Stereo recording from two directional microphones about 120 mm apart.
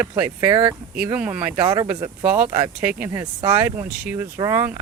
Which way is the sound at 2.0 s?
15° right (ahead or behind).